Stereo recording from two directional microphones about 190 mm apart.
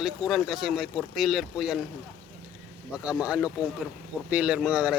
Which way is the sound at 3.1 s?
5° right (ahead or behind).